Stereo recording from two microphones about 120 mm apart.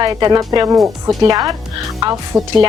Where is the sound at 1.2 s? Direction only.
30° right (ahead or behind).